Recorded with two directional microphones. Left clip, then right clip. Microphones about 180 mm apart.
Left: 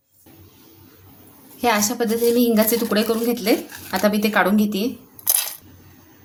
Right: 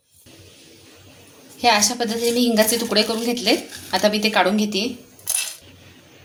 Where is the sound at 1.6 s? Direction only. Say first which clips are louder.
Right 2 dB; 45° left (ahead or behind).